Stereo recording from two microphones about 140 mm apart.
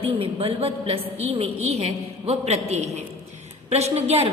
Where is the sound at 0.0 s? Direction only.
40° right (ahead or behind).